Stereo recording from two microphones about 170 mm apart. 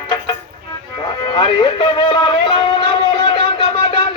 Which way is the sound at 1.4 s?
30° left (ahead or behind).